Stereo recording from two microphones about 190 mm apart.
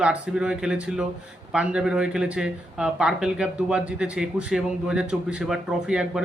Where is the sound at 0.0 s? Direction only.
5° right (ahead or behind).